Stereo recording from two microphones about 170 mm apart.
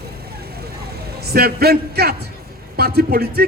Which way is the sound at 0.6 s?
70° right (ahead or behind).